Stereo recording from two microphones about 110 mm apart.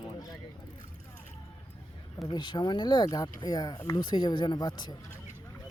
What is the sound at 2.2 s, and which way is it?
Speech, 40° left (ahead or behind).